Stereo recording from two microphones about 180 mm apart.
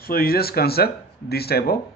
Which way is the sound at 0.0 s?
55° left (ahead or behind).